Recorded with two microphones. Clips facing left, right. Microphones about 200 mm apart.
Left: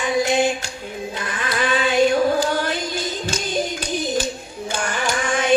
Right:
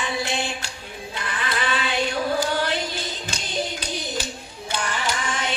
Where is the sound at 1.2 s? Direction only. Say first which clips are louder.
Left 3 dB; 45° left (ahead or behind).